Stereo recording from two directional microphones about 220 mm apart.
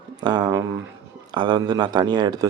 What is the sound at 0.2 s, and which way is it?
Speech, 20° right (ahead or behind).